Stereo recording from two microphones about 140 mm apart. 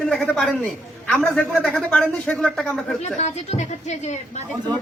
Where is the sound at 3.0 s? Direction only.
55° left (ahead or behind).